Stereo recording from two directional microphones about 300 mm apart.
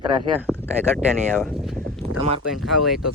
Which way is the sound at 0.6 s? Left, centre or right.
Centre.